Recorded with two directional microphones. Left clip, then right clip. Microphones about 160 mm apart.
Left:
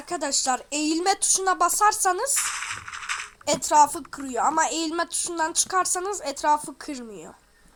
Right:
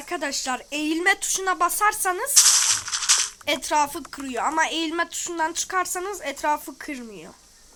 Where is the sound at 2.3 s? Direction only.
40° right (ahead or behind).